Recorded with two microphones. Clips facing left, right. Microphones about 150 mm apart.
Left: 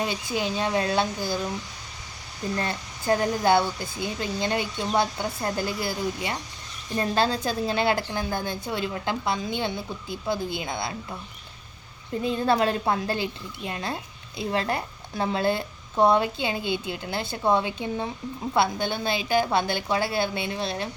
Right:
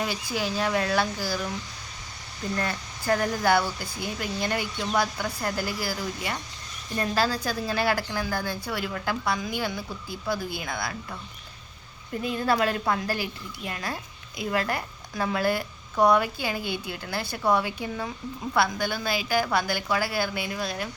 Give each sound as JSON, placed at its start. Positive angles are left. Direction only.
{"t": 0.0, "sound": "a woman's voice", "side_deg": 20}
{"t": 2.6, "sound": "a woman's voice", "side_deg": 20}
{"t": 12.2, "sound": "a woman's voice", "side_deg": 25}